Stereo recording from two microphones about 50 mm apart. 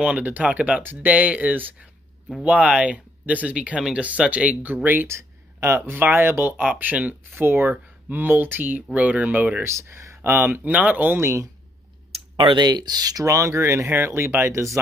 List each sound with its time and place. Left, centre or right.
0.0 s speech: right
2.4 s speech: right
5.0 s a sound: right
5.9 s speech: right
6.7 s speech: right
7.3 s speech: right
8.9 s speech: right
9.6 s speech: right
10.2 s speech: right
11.1 s speech: right
13.2 s speech: right
13.8 s speech: right